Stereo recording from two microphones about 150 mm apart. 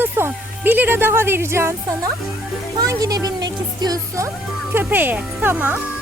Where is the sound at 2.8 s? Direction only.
25° right (ahead or behind).